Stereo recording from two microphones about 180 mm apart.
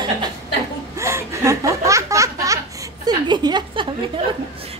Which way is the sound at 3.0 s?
25° right (ahead or behind).